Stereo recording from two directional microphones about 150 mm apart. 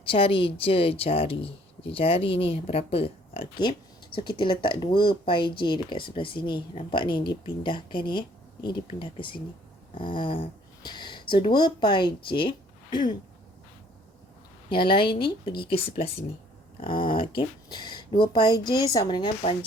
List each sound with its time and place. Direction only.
0.0 s speech: 35° left (ahead or behind)
14.7 s speech: 35° left (ahead or behind)